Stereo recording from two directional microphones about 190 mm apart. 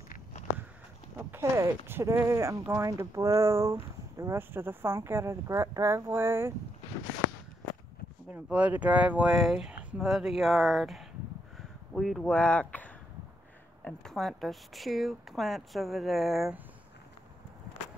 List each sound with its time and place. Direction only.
0.1 s walk: 40° left (ahead or behind)
1.1 s speech: 15° right (ahead or behind)
8.3 s speech: 5° right (ahead or behind)
11.5 s a sound: centre (ahead or behind)
13.8 s speech: centre (ahead or behind)